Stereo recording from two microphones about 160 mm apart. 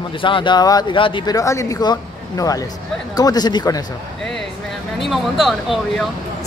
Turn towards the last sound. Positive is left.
turn(degrees=0)  # may be behind; listen again after turning